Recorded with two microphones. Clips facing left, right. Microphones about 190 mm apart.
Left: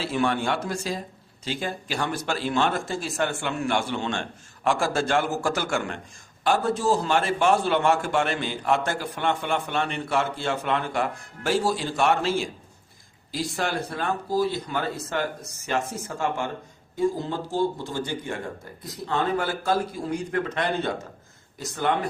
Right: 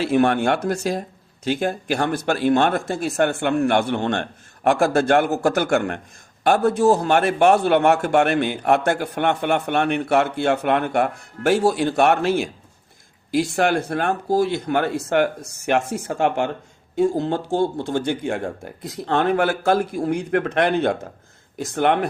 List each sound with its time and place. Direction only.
0.0 s a man's voice: 60° right (ahead or behind)